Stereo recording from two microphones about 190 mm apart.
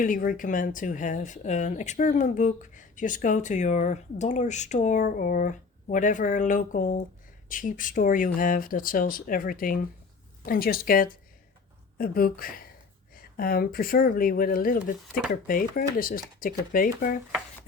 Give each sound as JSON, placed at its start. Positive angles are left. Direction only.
{"t": 0.0, "sound": "speech", "side_deg": 45}